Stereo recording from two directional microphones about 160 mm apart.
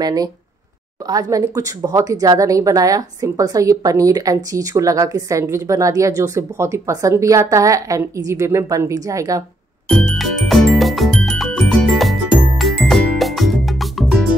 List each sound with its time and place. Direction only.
0.0 s a woman's voice: 25° right (ahead or behind)
9.8 s music: 5° left (ahead or behind)